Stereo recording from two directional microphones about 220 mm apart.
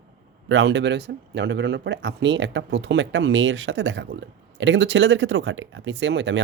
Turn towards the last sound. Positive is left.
turn(degrees=-55)  # may be behind; listen again after turning